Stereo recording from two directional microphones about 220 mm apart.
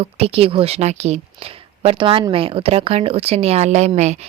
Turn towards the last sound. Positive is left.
turn(degrees=-30)  # may be behind; listen again after turning